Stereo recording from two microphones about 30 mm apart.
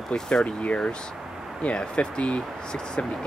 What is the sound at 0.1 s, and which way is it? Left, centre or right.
Speech, left.